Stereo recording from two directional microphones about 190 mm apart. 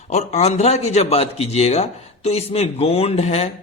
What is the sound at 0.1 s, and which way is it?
A man's voice, 35° left (ahead or behind).